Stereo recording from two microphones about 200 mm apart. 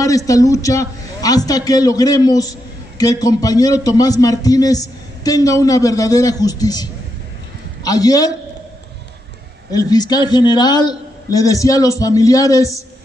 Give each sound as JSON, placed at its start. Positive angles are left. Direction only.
{"t": 0.0, "sound": "a man's voice", "side_deg": 15}
{"t": 9.7, "sound": "a man's voice", "side_deg": 20}